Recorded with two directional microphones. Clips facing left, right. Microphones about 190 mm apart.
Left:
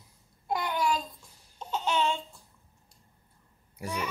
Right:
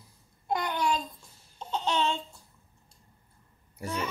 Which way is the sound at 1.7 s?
10° left (ahead or behind).